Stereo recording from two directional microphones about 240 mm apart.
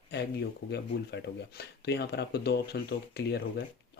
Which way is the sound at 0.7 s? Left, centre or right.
Left.